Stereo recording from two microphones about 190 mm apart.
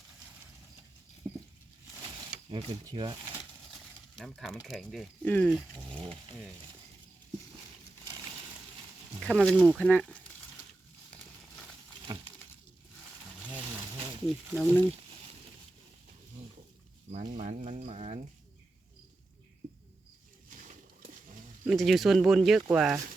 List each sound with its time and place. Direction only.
1.2 s patter: 5° right (ahead or behind)
2.5 s speech: 25° right (ahead or behind)
3.7 s a sound: centre (ahead or behind)
4.5 s speech: centre (ahead or behind)
5.9 s speech: 25° right (ahead or behind)
9.2 s speech: 5° left (ahead or behind)
14.5 s speech: 5° left (ahead or behind)
17.1 s speech: 35° right (ahead or behind)
20.5 s a sound: 45° right (ahead or behind)
21.6 s speech: centre (ahead or behind)